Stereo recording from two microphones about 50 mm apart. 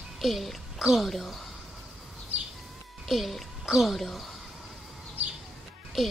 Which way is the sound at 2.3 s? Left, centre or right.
Right.